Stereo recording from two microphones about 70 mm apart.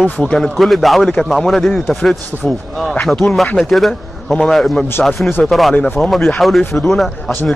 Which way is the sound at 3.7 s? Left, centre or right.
Centre.